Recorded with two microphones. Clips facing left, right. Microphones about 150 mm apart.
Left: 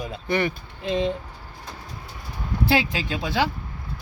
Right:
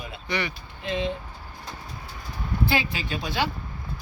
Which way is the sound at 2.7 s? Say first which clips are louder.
Left 4 dB; 90° left.